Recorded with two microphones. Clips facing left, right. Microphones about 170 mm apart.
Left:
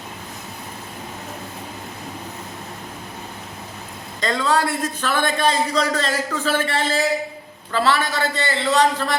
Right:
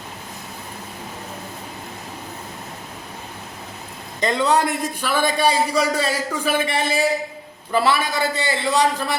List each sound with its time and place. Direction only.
4.2 s a man's voice: 20° right (ahead or behind)